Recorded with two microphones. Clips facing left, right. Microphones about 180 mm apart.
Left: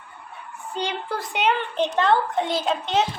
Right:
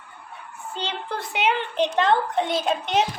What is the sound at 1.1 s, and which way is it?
A child's voice, centre (ahead or behind).